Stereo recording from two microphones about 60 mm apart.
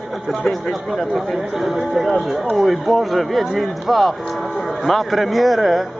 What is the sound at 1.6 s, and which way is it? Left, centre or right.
Speech, centre.